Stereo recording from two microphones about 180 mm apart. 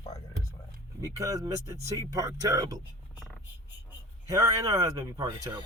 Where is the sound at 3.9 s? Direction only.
15° right (ahead or behind).